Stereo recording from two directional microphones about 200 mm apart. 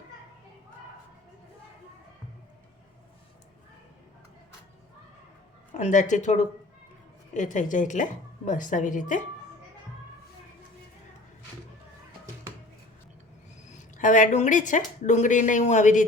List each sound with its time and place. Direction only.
5.7 s speech: 40° left (ahead or behind)
13.7 s speech: 40° left (ahead or behind)